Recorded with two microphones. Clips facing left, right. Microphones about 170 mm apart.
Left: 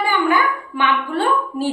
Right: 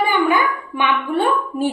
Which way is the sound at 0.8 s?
20° right (ahead or behind).